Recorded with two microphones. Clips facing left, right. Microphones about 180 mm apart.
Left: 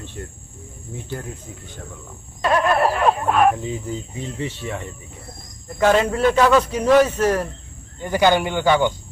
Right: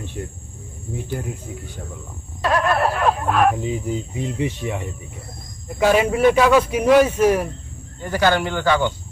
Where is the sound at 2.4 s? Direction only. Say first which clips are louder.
Left 1 dB; centre (ahead or behind).